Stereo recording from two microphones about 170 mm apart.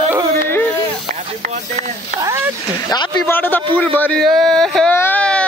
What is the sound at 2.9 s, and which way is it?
Speech, 25° left (ahead or behind).